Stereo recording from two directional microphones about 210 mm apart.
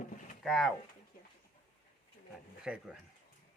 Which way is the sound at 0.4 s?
Centre (ahead or behind).